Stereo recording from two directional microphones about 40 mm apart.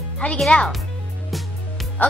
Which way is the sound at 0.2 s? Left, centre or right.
Left.